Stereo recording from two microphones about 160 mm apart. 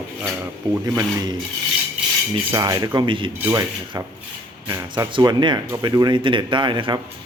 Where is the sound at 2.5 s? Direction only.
20° right (ahead or behind).